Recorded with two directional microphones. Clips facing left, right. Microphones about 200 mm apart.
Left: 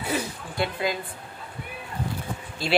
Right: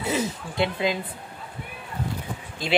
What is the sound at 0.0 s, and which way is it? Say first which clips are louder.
Speech: right 3 dB; 20° right (ahead or behind).